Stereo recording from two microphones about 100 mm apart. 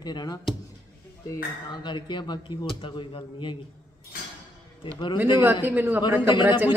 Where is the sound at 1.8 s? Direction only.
50° left (ahead or behind).